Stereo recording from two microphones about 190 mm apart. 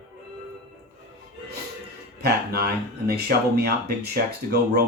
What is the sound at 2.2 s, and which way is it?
Speech, 55° right (ahead or behind).